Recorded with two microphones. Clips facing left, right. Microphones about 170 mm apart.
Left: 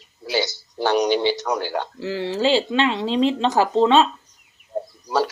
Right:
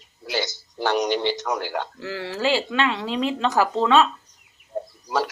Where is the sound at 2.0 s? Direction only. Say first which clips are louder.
Left 5 dB; 20° left (ahead or behind).